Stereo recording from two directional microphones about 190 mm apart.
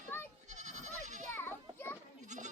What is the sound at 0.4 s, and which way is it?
Goat, 40° right (ahead or behind).